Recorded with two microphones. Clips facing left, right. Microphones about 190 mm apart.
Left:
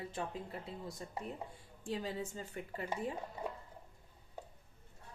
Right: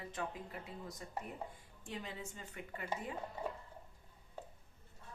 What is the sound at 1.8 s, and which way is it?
A woman's voice, 35° left (ahead or behind).